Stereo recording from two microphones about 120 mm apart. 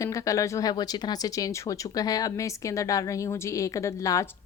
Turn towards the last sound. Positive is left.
turn(degrees=25)  # may be behind; listen again after turning